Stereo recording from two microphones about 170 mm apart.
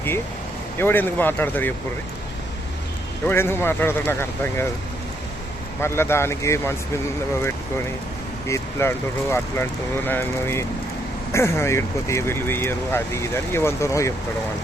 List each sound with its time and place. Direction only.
0.8 s speech: 10° left (ahead or behind)
3.2 s speech: 15° left (ahead or behind)
5.8 s speech: 15° left (ahead or behind)
8.4 s speech: 15° left (ahead or behind)